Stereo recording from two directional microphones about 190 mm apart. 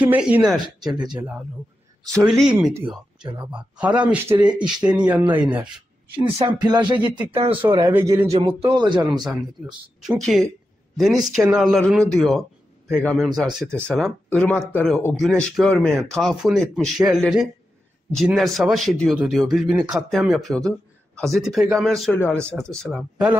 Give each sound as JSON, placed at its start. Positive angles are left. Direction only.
{"t": 0.1, "sound": "a man's voice", "side_deg": -5}
{"t": 2.2, "sound": "a man's voice", "side_deg": 0}
{"t": 6.4, "sound": "speech", "side_deg": -20}
{"t": 7.8, "sound": "speech", "side_deg": -15}
{"t": 8.3, "sound": "speech", "side_deg": -30}
{"t": 9.2, "sound": "a man's voice", "side_deg": 0}